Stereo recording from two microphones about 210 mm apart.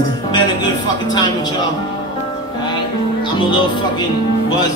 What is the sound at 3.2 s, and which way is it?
Music, 25° left (ahead or behind).